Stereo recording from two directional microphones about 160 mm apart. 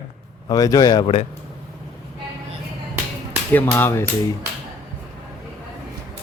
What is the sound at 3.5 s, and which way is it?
Speech, 15° left (ahead or behind).